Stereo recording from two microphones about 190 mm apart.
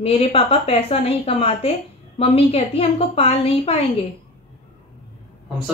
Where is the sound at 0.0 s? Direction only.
30° left (ahead or behind).